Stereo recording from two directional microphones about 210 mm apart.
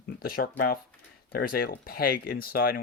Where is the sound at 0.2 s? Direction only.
45° left (ahead or behind).